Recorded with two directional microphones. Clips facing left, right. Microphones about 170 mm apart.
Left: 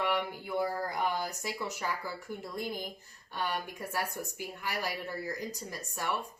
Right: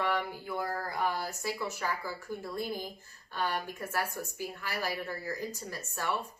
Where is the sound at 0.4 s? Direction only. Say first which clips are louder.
Left 3 dB; 15° left (ahead or behind).